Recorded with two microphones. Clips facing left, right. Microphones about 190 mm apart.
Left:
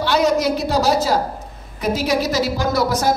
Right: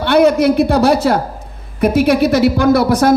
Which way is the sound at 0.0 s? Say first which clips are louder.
Right 6 dB; 60° right (ahead or behind).